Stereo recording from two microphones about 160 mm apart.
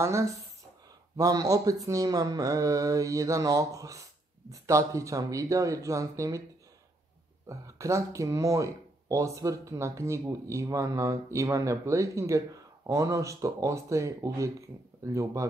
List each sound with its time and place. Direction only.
0.0 s speech: 20° right (ahead or behind)
7.4 s speech: 20° right (ahead or behind)